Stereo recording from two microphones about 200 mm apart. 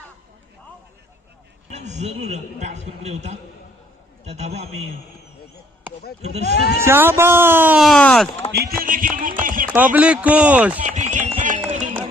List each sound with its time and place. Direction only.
1.7 s a man's voice: 35° right (ahead or behind)
6.4 s speech: 50° left (ahead or behind)
6.8 s speech: 10° right (ahead or behind)
8.5 s a sound: 50° right (ahead or behind)
9.6 s speech: 10° right (ahead or behind)
10.8 s a sound: 35° right (ahead or behind)
11.7 s music: 40° right (ahead or behind)